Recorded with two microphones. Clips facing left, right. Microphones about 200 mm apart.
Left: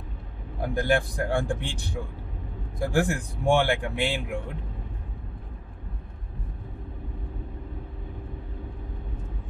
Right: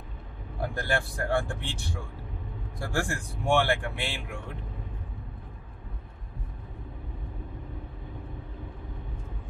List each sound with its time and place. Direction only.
0.6 s speech: 15° left (ahead or behind)